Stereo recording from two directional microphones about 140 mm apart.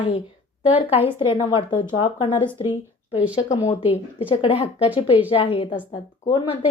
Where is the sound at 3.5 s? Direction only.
50° left (ahead or behind); by 6.6 s 35° left (ahead or behind).